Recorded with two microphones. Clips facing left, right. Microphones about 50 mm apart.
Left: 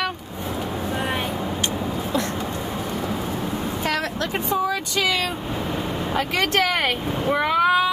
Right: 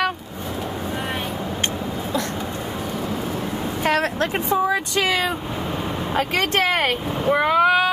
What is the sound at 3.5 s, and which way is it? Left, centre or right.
Speech, right.